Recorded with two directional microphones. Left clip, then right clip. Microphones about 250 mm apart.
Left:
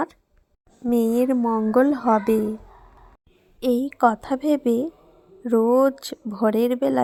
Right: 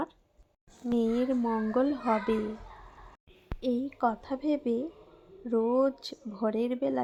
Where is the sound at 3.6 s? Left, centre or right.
Left.